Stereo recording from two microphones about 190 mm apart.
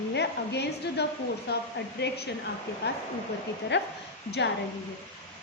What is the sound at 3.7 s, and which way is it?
Speech, 70° left (ahead or behind).